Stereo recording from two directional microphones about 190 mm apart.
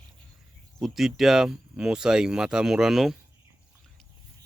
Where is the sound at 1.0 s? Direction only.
Centre (ahead or behind).